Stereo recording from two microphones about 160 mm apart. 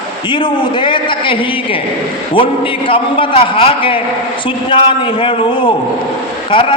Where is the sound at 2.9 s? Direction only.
35° left (ahead or behind).